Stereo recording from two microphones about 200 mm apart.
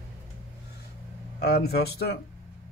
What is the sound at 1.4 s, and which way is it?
Speech, 55° left (ahead or behind).